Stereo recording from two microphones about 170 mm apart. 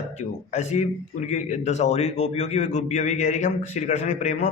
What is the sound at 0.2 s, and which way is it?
A man's voice, 40° left (ahead or behind).